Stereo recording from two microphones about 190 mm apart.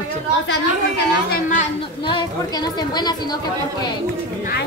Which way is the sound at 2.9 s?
20° left (ahead or behind).